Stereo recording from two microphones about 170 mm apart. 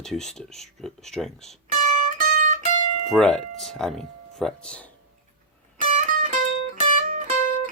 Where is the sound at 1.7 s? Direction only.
50° right (ahead or behind).